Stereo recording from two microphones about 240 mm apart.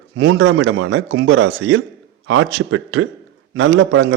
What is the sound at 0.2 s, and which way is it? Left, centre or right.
A man's voice, right.